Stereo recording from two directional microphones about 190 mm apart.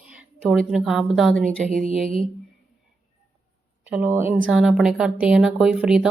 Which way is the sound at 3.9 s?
10° right (ahead or behind).